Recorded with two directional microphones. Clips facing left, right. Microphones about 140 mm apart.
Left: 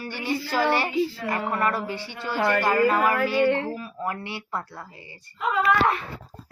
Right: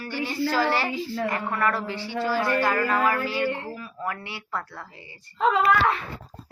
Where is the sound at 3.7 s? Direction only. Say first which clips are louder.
Left 2 dB; 25° left (ahead or behind).